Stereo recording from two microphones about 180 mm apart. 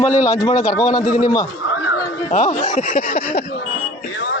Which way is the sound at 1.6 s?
90° left.